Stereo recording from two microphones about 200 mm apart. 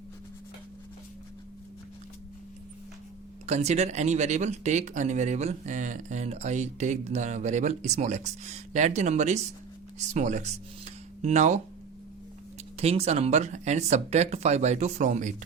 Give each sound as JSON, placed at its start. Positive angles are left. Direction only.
{"t": 3.4, "sound": "speech", "side_deg": -35}
{"t": 12.7, "sound": "speech", "side_deg": -30}